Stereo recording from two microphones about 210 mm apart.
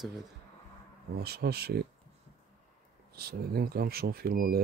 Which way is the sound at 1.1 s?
50° right (ahead or behind).